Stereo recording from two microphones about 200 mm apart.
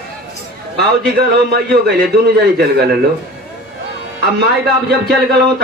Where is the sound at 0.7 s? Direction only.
55° right (ahead or behind).